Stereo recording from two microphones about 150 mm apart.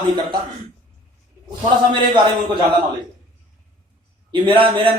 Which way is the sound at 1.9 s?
30° right (ahead or behind).